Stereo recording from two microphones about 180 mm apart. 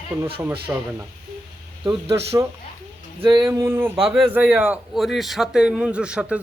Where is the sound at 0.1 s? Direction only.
Centre (ahead or behind).